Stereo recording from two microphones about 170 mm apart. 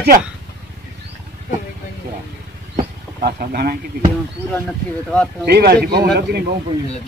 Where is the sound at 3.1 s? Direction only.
70° right (ahead or behind).